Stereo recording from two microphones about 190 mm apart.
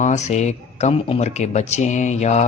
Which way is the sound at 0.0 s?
40° left (ahead or behind).